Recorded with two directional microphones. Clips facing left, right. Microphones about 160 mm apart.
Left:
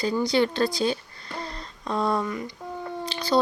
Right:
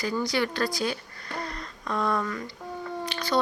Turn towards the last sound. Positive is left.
turn(degrees=30)  # may be behind; listen again after turning